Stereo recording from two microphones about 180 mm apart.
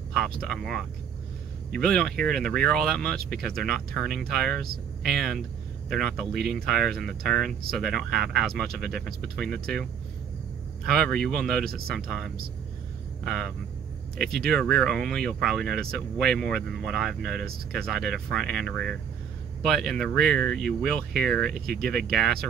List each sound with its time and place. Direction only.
0.4 s speech: centre (ahead or behind)
3.2 s speech: 60° right (ahead or behind)
3.4 s speech: centre (ahead or behind)
10.9 s speech: 5° left (ahead or behind)